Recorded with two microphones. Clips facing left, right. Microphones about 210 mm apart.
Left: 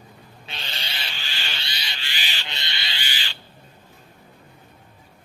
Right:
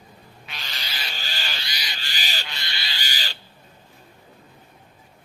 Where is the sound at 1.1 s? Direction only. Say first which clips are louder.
Right 2 dB; 40° right (ahead or behind).